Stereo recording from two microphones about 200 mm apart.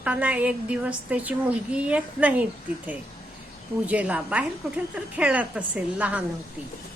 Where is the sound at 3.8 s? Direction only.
5° right (ahead or behind).